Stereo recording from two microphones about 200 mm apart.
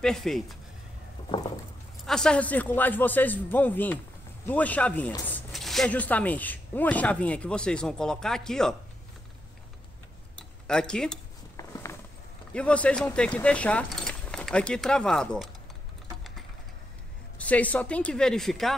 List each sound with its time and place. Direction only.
0.0 s a woman's voice: centre (ahead or behind)
2.0 s speech: 5° left (ahead or behind)
10.7 s a woman's voice: 5° left (ahead or behind)
11.5 s a sound: 15° left (ahead or behind)
12.5 s speech: 5° left (ahead or behind)
17.4 s a woman's voice: 5° left (ahead or behind)